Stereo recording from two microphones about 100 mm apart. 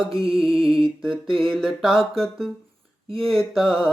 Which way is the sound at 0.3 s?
5° right (ahead or behind).